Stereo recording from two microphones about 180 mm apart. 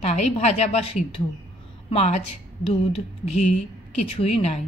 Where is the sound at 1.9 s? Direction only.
35° left (ahead or behind).